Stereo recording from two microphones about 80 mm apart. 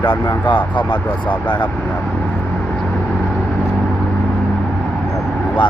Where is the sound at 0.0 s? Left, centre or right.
Left.